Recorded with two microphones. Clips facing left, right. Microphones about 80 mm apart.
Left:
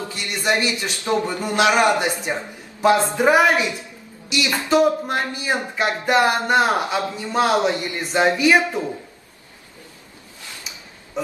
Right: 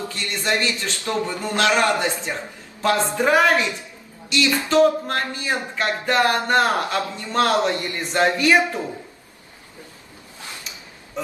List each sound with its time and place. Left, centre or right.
0.1 s speech: centre